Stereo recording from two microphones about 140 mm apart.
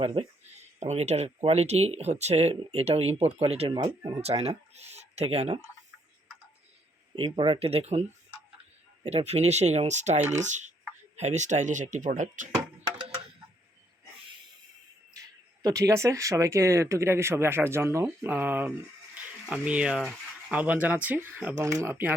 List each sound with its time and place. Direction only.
0.0 s speech: 45° right (ahead or behind)
7.2 s speech: 40° right (ahead or behind)
9.0 s speech: 50° right (ahead or behind)
10.2 s speech: 15° right (ahead or behind)
10.4 s speech: 60° right (ahead or behind)
15.1 s speech: 25° right (ahead or behind)
19.1 s a sound: 10° right (ahead or behind)
20.8 s speech: 10° right (ahead or behind)